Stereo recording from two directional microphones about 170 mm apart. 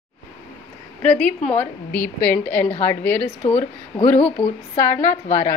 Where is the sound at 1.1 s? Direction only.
5° left (ahead or behind).